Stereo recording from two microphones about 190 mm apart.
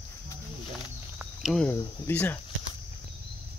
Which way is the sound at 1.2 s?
Centre (ahead or behind).